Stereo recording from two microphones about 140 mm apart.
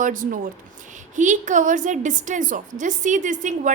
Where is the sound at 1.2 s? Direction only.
60° right (ahead or behind).